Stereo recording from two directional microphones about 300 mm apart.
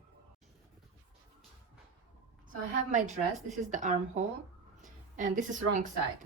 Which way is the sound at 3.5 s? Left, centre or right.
Right.